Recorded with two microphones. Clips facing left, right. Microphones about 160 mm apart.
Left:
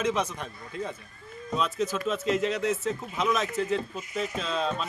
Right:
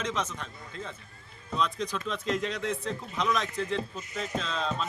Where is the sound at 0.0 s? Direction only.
10° left (ahead or behind).